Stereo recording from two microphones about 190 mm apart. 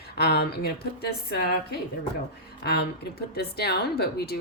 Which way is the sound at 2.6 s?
60° left (ahead or behind).